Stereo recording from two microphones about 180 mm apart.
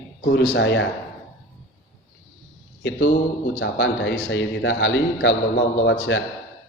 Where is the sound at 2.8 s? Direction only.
75° left (ahead or behind).